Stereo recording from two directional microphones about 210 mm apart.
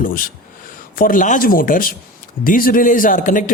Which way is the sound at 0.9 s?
40° left (ahead or behind).